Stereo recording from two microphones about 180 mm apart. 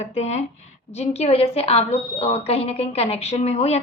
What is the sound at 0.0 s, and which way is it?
A woman's voice, 40° left (ahead or behind).